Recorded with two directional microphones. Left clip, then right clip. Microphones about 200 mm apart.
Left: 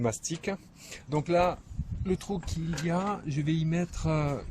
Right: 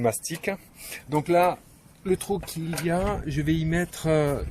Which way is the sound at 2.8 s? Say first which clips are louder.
Right 5 dB; 10° right (ahead or behind).